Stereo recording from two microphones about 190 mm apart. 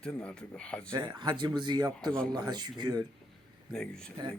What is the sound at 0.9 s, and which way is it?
A man's voice, 20° right (ahead or behind).